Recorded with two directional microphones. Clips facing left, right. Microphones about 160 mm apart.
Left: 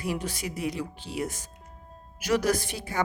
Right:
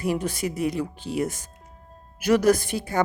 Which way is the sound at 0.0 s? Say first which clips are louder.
Right 6 dB; 50° right (ahead or behind).